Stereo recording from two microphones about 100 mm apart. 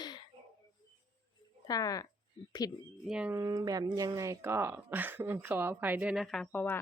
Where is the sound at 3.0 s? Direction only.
5° right (ahead or behind).